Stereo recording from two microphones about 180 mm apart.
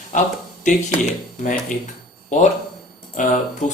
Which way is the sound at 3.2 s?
45° left (ahead or behind).